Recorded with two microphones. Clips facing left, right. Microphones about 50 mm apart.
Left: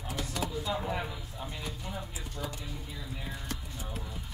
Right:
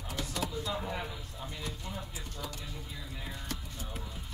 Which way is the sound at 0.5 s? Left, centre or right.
Centre.